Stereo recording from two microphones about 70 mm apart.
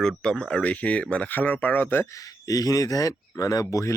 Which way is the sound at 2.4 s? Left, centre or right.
Left.